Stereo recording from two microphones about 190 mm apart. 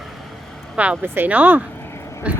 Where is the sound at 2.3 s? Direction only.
5° right (ahead or behind).